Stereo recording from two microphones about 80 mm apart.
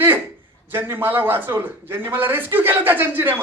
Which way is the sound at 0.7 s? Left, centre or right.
Right.